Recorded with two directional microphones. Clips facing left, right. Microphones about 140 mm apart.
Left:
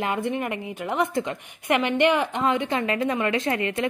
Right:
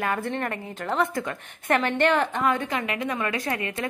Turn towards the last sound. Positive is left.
turn(degrees=25)  # may be behind; listen again after turning